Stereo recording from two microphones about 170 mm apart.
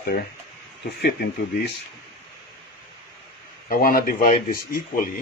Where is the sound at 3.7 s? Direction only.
60° left (ahead or behind).